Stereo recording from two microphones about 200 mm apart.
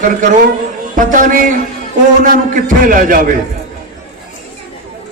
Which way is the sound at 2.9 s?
45° right (ahead or behind).